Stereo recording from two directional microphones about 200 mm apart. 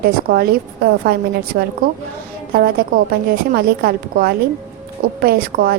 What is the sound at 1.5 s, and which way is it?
A woman's voice, 45° right (ahead or behind).